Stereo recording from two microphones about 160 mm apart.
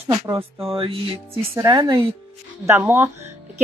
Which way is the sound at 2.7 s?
15° right (ahead or behind).